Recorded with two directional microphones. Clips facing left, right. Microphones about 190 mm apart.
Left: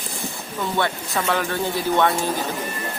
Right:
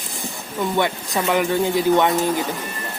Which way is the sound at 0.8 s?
15° right (ahead or behind).